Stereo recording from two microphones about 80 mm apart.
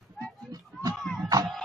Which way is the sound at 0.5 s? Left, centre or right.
Right.